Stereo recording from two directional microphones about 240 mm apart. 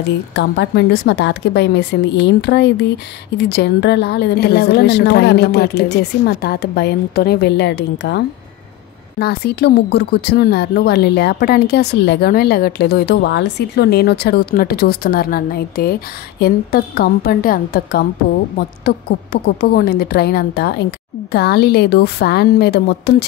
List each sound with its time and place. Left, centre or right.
0.3 s a woman's voice: left